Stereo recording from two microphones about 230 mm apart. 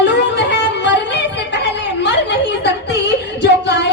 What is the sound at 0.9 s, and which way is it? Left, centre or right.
Music, left.